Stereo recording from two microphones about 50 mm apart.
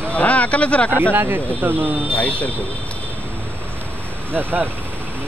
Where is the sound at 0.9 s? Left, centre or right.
Right.